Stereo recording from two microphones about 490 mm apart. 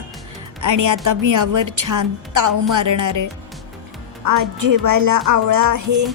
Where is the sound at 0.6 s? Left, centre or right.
Right.